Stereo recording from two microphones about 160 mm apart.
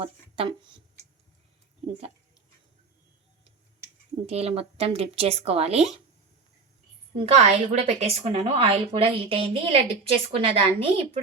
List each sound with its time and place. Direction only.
0.0 s a woman's voice: 35° right (ahead or behind)
4.3 s a woman's voice: 40° right (ahead or behind)
7.2 s a woman's voice: 45° right (ahead or behind)